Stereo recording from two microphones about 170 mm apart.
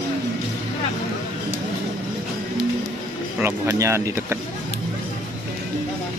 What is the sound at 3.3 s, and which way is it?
Speech, 15° right (ahead or behind).